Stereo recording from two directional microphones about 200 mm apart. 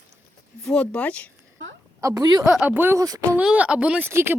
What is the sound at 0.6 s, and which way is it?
Speech, 5° left (ahead or behind).